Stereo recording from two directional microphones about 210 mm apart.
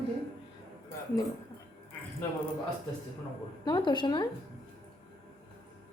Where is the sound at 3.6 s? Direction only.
20° left (ahead or behind).